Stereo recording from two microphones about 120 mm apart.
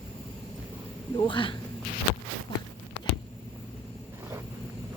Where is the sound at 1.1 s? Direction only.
40° left (ahead or behind).